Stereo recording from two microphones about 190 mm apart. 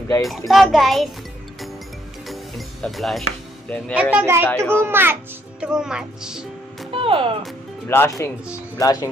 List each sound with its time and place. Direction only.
0.2 s a child's voice: centre (ahead or behind)
2.2 s music: centre (ahead or behind)
3.9 s a child's voice: 5° right (ahead or behind)
6.9 s music: 30° right (ahead or behind)
7.9 s speech: 15° left (ahead or behind)